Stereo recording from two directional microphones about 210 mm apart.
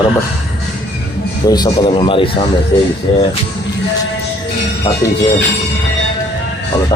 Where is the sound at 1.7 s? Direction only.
25° left (ahead or behind).